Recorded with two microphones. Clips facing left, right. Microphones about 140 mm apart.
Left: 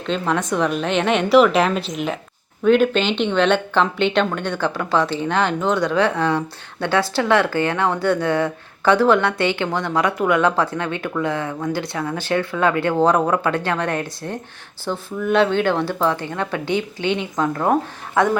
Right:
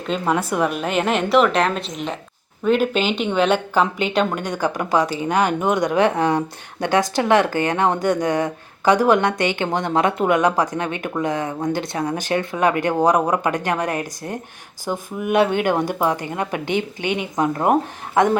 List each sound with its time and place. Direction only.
0.1 s a woman's voice: 10° right (ahead or behind)